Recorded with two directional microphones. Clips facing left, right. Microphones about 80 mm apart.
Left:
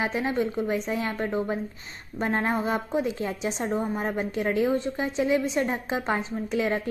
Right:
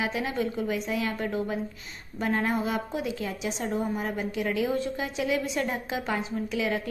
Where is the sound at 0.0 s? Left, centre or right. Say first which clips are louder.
Left 3 dB; left.